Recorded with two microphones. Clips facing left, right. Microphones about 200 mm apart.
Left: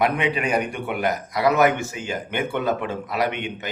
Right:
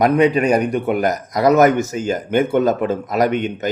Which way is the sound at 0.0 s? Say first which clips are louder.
Right 8 dB; 40° right (ahead or behind).